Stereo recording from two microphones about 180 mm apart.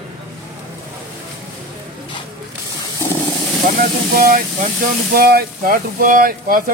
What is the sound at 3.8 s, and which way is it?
Speech, 50° right (ahead or behind).